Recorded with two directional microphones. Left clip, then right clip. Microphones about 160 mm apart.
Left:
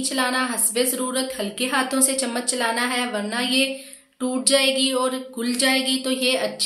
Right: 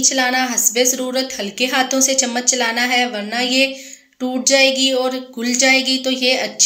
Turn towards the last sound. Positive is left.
turn(degrees=-10)  # may be behind; listen again after turning